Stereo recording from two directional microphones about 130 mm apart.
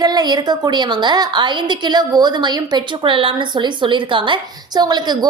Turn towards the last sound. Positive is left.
turn(degrees=-35)  # may be behind; listen again after turning